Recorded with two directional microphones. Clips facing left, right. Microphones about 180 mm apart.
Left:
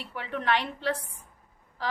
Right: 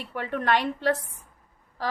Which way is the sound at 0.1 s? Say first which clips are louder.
Right 3 dB; 50° right (ahead or behind).